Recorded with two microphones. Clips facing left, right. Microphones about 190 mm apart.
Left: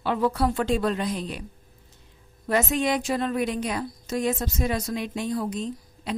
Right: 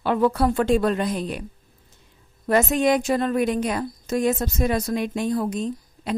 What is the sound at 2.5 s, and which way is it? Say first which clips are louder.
A woman's voice: right 5 dB; 45° right (ahead or behind).